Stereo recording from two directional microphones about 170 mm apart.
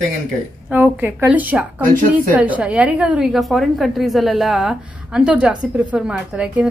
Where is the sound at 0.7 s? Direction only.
10° right (ahead or behind).